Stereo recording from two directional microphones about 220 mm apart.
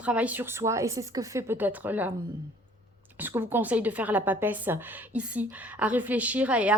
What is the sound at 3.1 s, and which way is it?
A woman's voice, 10° right (ahead or behind).